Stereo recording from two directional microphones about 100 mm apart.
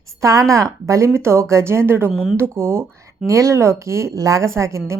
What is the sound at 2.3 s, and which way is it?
A woman's voice, 25° right (ahead or behind).